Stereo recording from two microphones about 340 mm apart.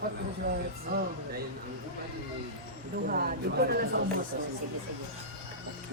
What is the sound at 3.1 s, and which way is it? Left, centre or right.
Speech, right.